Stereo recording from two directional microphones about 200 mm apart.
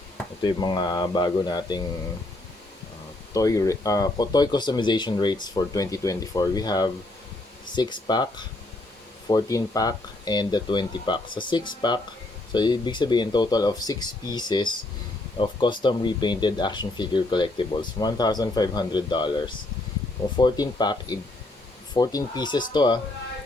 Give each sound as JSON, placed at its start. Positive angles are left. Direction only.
{"t": 0.4, "sound": "speech", "side_deg": 20}
{"t": 3.3, "sound": "speech", "side_deg": 15}